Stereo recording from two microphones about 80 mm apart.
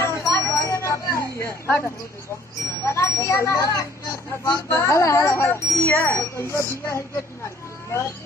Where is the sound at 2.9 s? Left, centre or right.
Left.